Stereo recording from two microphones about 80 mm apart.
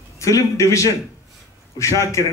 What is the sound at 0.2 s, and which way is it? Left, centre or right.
A man's voice, left.